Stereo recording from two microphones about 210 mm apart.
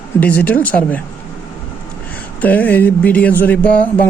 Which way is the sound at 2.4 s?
10° left (ahead or behind).